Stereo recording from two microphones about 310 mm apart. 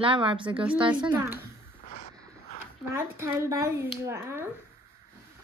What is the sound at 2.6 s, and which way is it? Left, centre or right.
Speech, centre.